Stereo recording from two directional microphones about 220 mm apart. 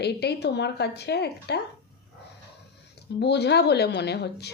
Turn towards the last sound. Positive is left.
turn(degrees=50)  # may be behind; listen again after turning